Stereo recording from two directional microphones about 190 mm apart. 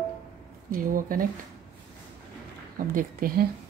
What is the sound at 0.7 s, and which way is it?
Speech, 45° right (ahead or behind).